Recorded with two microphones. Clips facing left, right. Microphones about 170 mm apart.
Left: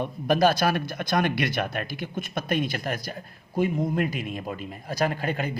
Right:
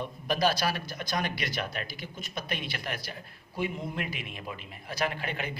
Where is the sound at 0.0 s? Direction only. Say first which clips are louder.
Left 6 dB; 50° left (ahead or behind).